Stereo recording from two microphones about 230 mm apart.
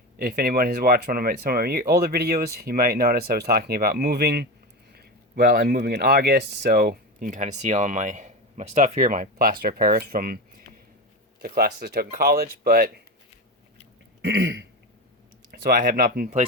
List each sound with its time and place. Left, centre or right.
0.2 s speech: right
14.2 s throat clearing: right
15.6 s speech: right